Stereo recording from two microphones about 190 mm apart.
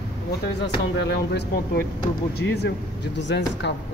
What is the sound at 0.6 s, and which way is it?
Speech, 65° left (ahead or behind).